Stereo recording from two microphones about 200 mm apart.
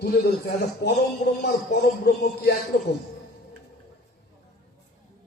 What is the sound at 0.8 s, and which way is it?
Speech, 55° left (ahead or behind).